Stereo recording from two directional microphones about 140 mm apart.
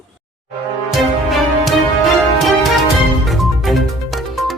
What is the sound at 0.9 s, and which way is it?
Music, centre (ahead or behind).